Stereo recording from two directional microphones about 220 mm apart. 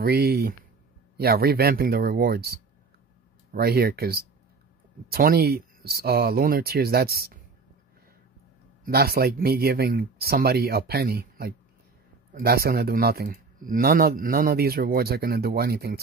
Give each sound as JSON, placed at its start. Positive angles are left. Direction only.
{"t": 0.0, "sound": "speech", "side_deg": -45}
{"t": 8.8, "sound": "speech", "side_deg": -45}